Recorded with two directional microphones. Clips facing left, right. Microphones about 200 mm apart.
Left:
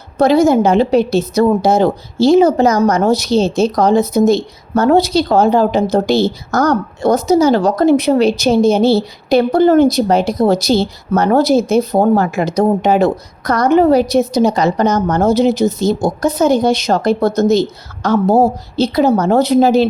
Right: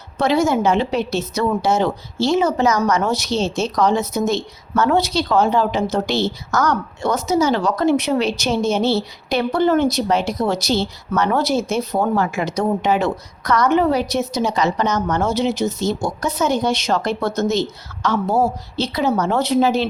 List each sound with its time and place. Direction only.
0.2 s speech: 35° left (ahead or behind)